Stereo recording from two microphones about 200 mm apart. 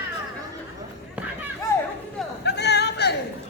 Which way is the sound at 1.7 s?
15° left (ahead or behind).